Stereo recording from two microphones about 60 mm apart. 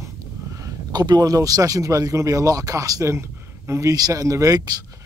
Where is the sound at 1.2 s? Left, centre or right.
Right.